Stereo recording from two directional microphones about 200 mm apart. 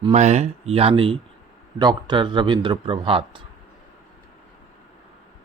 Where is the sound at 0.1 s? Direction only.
35° right (ahead or behind).